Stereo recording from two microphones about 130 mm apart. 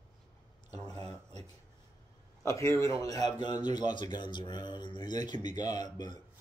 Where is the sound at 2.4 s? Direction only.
20° left (ahead or behind).